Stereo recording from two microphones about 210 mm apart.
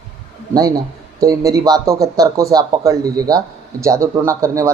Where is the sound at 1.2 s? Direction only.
15° right (ahead or behind).